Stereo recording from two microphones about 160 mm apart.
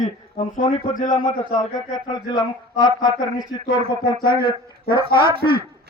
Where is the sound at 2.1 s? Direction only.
25° left (ahead or behind).